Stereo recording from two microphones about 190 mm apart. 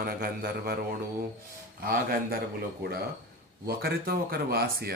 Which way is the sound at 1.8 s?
50° right (ahead or behind).